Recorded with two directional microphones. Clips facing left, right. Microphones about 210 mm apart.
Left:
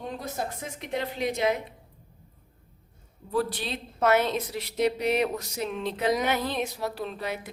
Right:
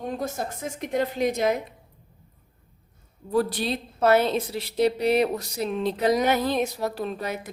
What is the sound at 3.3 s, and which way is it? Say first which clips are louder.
A woman's voice: right 4 dB; 40° right (ahead or behind).